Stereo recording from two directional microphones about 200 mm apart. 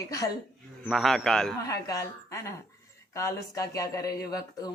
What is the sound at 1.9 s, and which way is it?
Speech, 15° left (ahead or behind).